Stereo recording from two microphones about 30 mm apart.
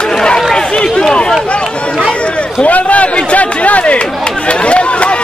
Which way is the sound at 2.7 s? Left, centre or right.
Left.